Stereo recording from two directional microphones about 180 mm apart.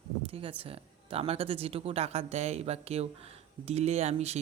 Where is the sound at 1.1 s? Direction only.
30° right (ahead or behind).